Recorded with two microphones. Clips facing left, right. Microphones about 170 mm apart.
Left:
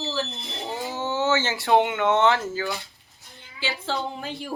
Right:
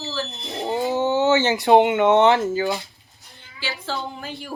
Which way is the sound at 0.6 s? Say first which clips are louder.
Right 8 dB; 20° right (ahead or behind).